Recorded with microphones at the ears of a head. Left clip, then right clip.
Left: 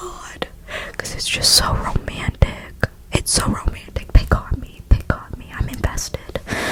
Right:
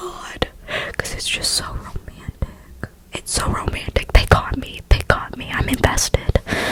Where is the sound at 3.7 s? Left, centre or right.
Right.